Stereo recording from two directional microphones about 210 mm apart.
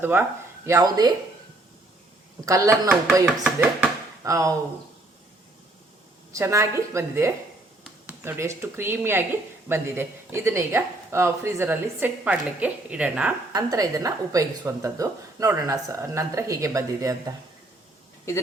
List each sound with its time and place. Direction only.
0.0 s speech: 10° right (ahead or behind)
2.4 s a woman's voice: 15° right (ahead or behind)
3.6 s a sound: 15° right (ahead or behind)
6.3 s a woman's voice: 15° right (ahead or behind)
13.5 s a woman's voice: 15° right (ahead or behind)